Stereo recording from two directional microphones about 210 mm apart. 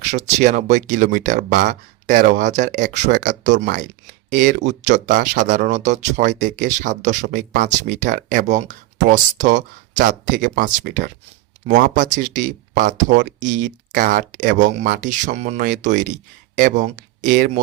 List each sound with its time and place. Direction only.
0.0 s speech: 35° right (ahead or behind)